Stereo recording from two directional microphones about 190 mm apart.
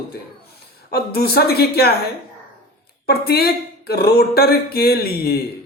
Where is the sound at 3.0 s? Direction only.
55° left (ahead or behind).